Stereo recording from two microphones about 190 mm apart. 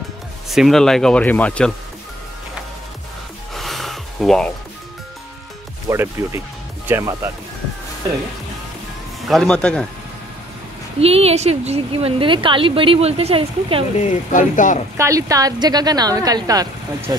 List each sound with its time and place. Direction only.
0.5 s speech: centre (ahead or behind)
3.5 s gasp: centre (ahead or behind)
5.9 s speech: 15° right (ahead or behind)
9.3 s speech: 5° left (ahead or behind)
11.0 s a woman's voice: 30° right (ahead or behind)
13.9 s speech: 40° left (ahead or behind)
15.0 s a woman's voice: 15° right (ahead or behind)